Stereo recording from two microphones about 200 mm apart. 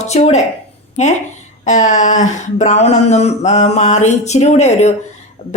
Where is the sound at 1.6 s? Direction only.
40° left (ahead or behind).